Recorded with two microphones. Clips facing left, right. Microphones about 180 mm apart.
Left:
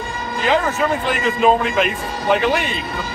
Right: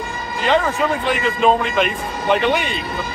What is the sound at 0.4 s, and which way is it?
A man's voice, 5° left (ahead or behind).